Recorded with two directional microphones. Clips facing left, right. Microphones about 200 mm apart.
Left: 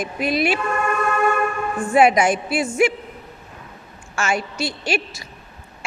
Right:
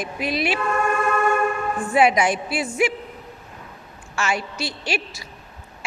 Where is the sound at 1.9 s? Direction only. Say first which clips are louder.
Left 3 dB; 50° left (ahead or behind).